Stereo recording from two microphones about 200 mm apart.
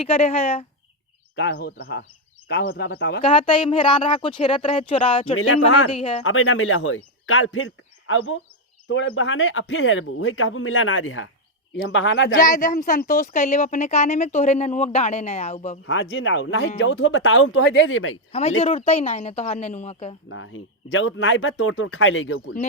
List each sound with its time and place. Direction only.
0.0 s a woman's voice: 30° left (ahead or behind)
1.4 s a man's voice: 55° left (ahead or behind)
3.2 s a woman's voice: 25° left (ahead or behind)
5.4 s speech: 90° left
6.0 s a woman's voice: 25° left (ahead or behind)
6.2 s speech: 90° left
11.7 s speech: 65° left (ahead or behind)
12.4 s a woman's voice: 40° left (ahead or behind)
15.9 s speech: 70° left (ahead or behind)
18.3 s a woman's voice: 30° left (ahead or behind)
20.3 s speech: 70° left (ahead or behind)